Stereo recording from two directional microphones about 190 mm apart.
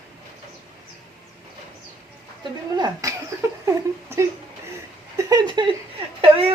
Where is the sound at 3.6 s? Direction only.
15° right (ahead or behind).